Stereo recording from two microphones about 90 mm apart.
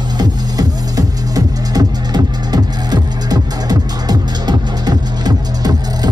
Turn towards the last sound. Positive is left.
turn(degrees=-50)  # may be behind; listen again after turning